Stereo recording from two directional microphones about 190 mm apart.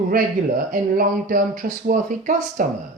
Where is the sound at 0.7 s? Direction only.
45° right (ahead or behind).